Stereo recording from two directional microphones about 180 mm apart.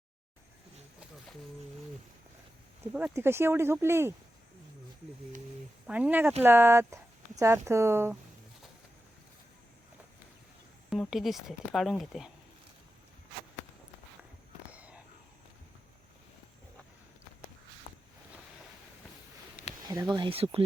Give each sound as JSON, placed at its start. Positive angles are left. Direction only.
{"t": 2.9, "sound": "speech", "side_deg": -10}
{"t": 5.9, "sound": "speech", "side_deg": -10}
{"t": 10.8, "sound": "speech", "side_deg": 0}
{"t": 14.7, "sound": "a sound", "side_deg": -5}
{"t": 19.9, "sound": "speech", "side_deg": -20}